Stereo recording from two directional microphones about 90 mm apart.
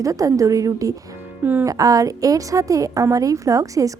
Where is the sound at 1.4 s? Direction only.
20° right (ahead or behind).